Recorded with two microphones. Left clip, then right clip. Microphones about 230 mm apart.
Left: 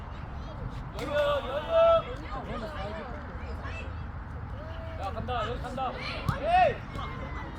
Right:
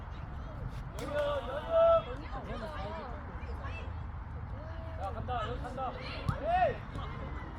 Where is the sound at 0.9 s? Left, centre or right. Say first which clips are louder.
Left 6 dB; left.